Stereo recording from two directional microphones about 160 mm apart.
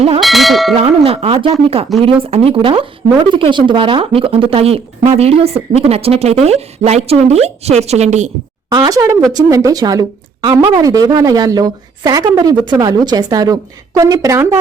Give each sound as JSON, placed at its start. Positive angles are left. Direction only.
{"t": 0.2, "sound": "a sound", "side_deg": 0}
{"t": 0.8, "sound": "a woman's voice", "side_deg": -40}
{"t": 8.7, "sound": "a woman's voice", "side_deg": -25}